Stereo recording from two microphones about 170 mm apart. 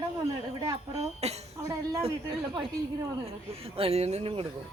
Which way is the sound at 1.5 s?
20° right (ahead or behind).